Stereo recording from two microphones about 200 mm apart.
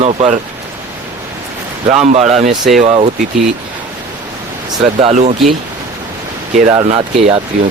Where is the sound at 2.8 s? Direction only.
30° right (ahead or behind).